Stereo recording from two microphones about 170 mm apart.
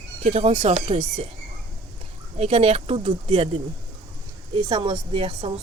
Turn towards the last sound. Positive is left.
turn(degrees=-35)  # may be behind; listen again after turning